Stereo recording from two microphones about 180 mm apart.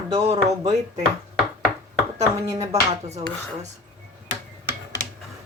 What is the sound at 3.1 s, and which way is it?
Speech, 40° right (ahead or behind).